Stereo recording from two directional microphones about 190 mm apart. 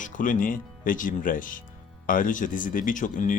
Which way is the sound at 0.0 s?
45° left (ahead or behind).